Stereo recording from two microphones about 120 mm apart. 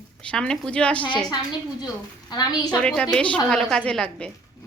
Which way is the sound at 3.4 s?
5° left (ahead or behind).